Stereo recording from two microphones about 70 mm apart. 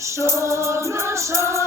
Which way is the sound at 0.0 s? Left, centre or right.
Right.